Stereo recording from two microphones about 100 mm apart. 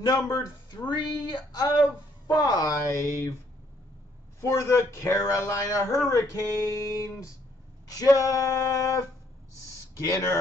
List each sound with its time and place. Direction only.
0.0 s speech: 40° left (ahead or behind)
4.4 s a man's voice: 30° left (ahead or behind)